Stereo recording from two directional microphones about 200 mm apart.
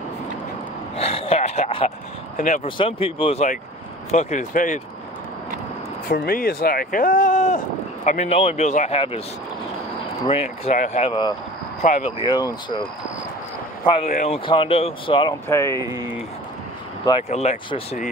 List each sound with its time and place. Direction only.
0.9 s speech: 30° left (ahead or behind)
2.3 s speech: 40° left (ahead or behind)
2.6 s speech: 25° left (ahead or behind)
6.0 s speech: 45° left (ahead or behind); by 9.2 s 30° left (ahead or behind)
10.2 s speech: 30° left (ahead or behind)
11.8 s speech: 35° left (ahead or behind)
12.3 s speech: 20° left (ahead or behind)
14.0 s speech: 40° left (ahead or behind)
15.4 s speech: 15° left (ahead or behind)
15.8 s speech: 20° right (ahead or behind)
17.3 s speech: 30° left (ahead or behind)